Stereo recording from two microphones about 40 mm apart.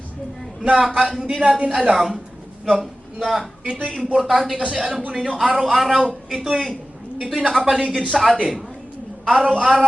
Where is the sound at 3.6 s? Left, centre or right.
Right.